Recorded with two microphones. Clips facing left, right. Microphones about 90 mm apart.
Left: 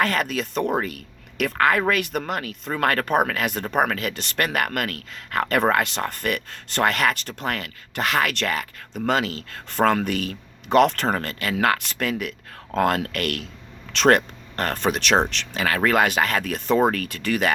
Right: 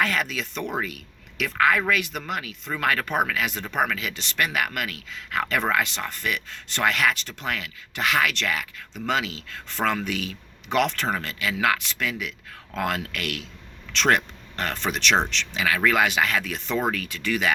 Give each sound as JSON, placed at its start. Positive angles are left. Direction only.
{"t": 0.0, "sound": "speech", "side_deg": 45}